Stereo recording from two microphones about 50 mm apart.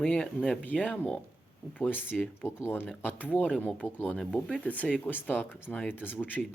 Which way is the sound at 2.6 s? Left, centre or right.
Left.